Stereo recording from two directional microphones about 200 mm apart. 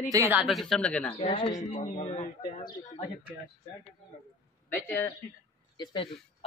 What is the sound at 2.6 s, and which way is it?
Speech, 25° left (ahead or behind).